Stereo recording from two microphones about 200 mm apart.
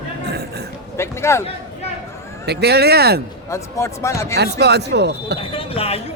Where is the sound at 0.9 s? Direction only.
15° left (ahead or behind).